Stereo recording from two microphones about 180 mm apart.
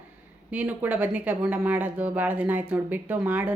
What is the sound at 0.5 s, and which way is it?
A woman's voice, 10° right (ahead or behind).